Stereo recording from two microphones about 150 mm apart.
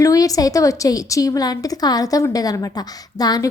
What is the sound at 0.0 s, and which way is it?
A woman's voice, 25° left (ahead or behind).